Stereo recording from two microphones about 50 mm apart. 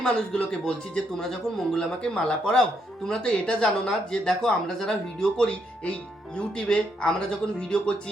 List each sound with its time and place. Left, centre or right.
0.3 s speech: centre